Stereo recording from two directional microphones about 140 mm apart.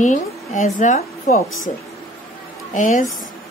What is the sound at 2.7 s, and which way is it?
Speech, 65° left (ahead or behind).